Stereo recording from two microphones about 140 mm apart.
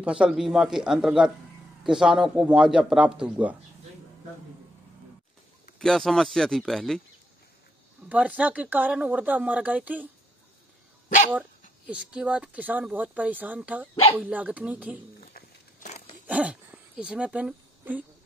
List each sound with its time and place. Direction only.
0.0 s a man's voice: 5° right (ahead or behind)
5.8 s a man's voice: centre (ahead or behind)
8.1 s speech: 10° right (ahead or behind)
11.9 s speech: 5° right (ahead or behind)
15.1 s a sound: 90° left
16.3 s dog: 10° right (ahead or behind)